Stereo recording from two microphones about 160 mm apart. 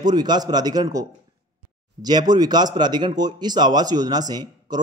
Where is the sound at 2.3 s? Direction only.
25° right (ahead or behind).